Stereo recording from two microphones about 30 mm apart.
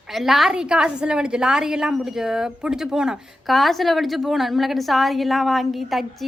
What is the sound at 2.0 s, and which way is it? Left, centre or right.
A woman's voice, centre.